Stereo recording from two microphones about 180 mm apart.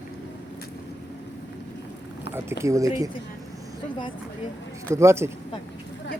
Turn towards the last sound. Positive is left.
turn(degrees=-15)  # may be behind; listen again after turning